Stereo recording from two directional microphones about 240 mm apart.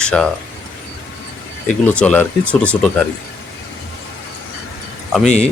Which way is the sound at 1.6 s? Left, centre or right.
Centre.